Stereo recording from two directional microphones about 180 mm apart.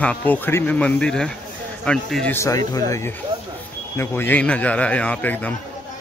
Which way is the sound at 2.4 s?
20° left (ahead or behind).